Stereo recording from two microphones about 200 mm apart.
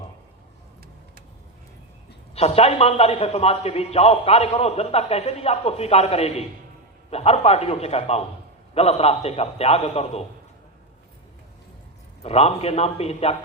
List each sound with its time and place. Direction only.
2.3 s a man's voice: 30° left (ahead or behind)
12.2 s a man's voice: 30° left (ahead or behind)